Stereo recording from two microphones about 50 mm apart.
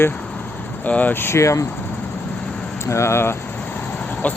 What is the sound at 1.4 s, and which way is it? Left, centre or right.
Speech, left.